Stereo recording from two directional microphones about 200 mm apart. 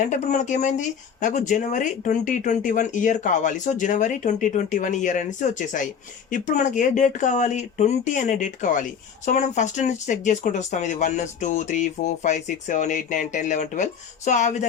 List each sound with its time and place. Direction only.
0.0 s speech: 35° left (ahead or behind)